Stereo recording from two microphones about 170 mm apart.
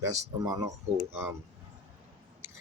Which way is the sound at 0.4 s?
20° right (ahead or behind).